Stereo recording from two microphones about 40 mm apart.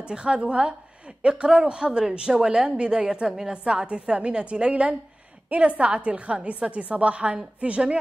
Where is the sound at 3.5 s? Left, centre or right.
Right.